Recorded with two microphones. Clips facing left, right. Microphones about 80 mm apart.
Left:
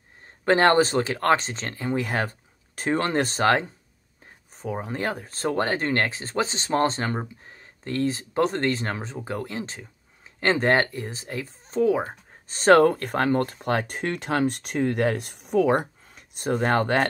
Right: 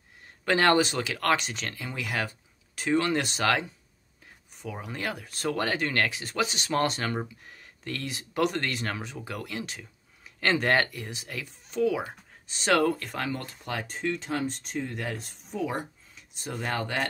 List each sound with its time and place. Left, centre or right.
0.5 s speech: left